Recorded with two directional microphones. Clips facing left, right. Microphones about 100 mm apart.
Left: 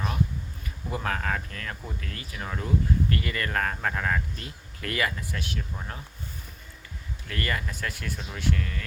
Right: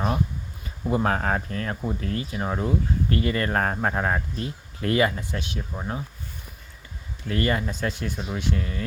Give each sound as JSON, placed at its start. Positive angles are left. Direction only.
{"t": 0.9, "sound": "speech", "side_deg": -30}
{"t": 7.3, "sound": "speech", "side_deg": -25}